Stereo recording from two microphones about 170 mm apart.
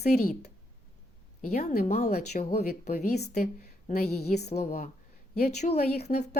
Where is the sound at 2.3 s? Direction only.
40° left (ahead or behind).